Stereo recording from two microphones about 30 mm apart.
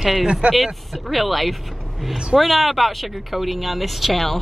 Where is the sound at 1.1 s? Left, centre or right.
Centre.